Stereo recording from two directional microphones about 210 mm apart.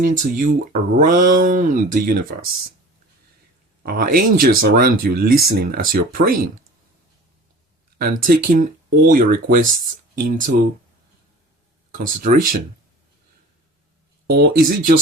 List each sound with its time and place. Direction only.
0.0 s speech: 40° right (ahead or behind)
3.8 s speech: 45° right (ahead or behind)
7.9 s speech: 45° right (ahead or behind)
11.9 s speech: 40° right (ahead or behind)
14.3 s speech: 45° right (ahead or behind)